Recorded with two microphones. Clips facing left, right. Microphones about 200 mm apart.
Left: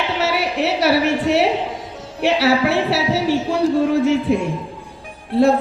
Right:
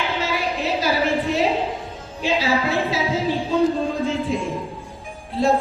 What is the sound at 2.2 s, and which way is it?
A man's voice, 75° left (ahead or behind).